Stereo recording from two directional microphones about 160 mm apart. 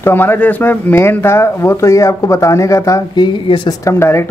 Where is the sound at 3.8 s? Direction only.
15° left (ahead or behind).